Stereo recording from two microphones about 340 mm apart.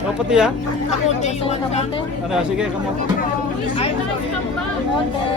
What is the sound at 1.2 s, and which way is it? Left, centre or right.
Music, centre.